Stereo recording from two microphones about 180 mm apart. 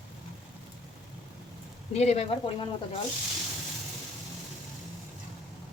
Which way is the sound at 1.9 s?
35° left (ahead or behind).